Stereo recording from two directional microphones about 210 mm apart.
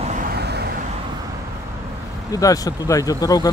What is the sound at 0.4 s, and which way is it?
Vehicle, 50° right (ahead or behind).